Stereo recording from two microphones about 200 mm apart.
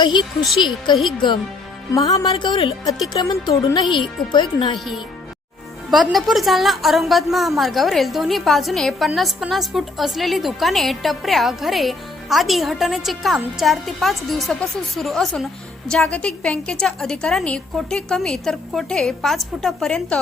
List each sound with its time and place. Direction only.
0.0 s speech: 20° left (ahead or behind)
1.9 s music: 15° left (ahead or behind)
2.3 s speech: 25° left (ahead or behind)
5.9 s a woman's voice: centre (ahead or behind)